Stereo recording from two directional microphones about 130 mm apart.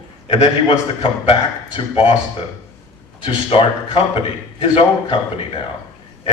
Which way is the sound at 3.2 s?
40° left (ahead or behind).